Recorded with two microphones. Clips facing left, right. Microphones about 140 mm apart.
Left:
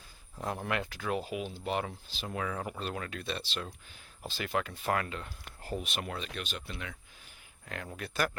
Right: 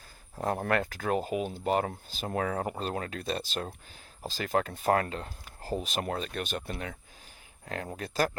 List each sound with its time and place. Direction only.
0.3 s speech: 45° right (ahead or behind)